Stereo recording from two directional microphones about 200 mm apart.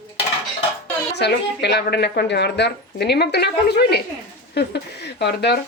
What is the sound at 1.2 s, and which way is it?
Speech, 55° left (ahead or behind).